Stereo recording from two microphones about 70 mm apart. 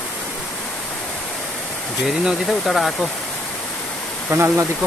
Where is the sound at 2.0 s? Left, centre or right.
Centre.